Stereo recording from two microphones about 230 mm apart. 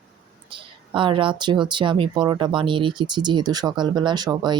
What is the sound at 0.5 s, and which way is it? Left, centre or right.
Speech, right.